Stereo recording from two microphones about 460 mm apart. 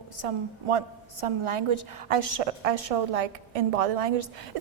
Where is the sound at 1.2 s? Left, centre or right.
Right.